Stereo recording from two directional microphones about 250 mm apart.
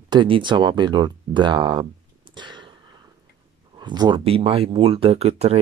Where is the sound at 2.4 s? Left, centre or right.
Centre.